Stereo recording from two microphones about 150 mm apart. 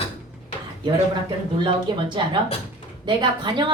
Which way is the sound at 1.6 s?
30° right (ahead or behind).